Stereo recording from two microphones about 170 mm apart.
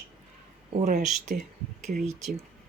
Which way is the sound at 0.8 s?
45° right (ahead or behind).